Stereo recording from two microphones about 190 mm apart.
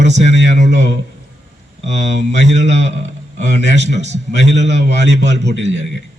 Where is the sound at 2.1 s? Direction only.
65° right (ahead or behind).